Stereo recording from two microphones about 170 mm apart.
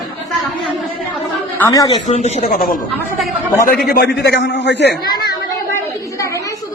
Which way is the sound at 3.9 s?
70° left (ahead or behind).